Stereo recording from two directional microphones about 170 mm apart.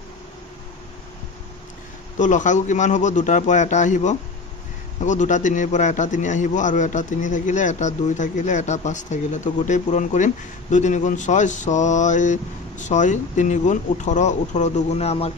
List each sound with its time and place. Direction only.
2.1 s a man's voice: 45° left (ahead or behind)